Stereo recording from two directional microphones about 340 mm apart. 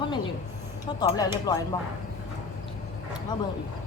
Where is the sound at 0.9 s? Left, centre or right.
Centre.